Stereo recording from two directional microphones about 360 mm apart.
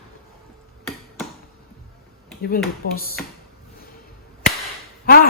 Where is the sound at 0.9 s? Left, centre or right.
Centre.